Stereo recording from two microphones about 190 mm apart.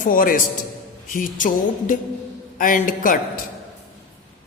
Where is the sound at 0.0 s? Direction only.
45° left (ahead or behind).